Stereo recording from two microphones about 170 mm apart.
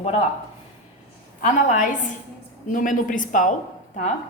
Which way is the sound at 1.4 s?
45° left (ahead or behind).